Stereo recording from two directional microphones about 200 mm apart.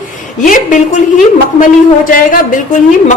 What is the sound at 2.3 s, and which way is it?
Speech, 40° left (ahead or behind).